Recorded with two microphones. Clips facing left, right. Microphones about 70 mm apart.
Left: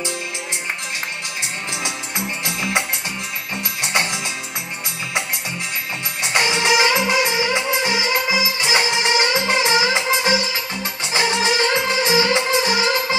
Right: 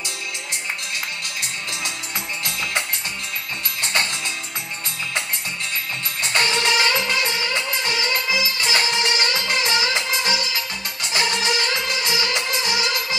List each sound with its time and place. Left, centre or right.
1.4 s music: centre
3.8 s music: centre
6.2 s music: centre